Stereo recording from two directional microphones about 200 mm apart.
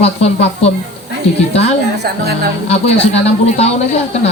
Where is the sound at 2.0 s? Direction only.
50° right (ahead or behind).